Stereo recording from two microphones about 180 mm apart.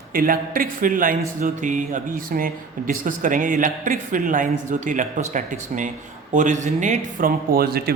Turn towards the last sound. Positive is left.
turn(degrees=-60)  # may be behind; listen again after turning